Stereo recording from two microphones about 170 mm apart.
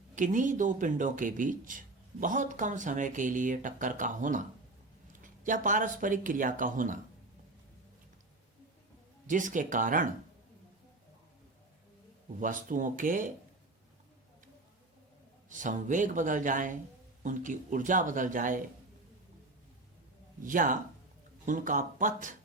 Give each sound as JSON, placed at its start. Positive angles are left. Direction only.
{"t": 0.2, "sound": "speech", "side_deg": -50}
{"t": 9.2, "sound": "speech", "side_deg": -50}
{"t": 12.4, "sound": "speech", "side_deg": -50}
{"t": 15.4, "sound": "speech", "side_deg": -50}
{"t": 20.4, "sound": "speech", "side_deg": -50}